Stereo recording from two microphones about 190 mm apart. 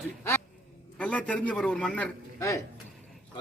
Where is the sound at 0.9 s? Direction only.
5° left (ahead or behind).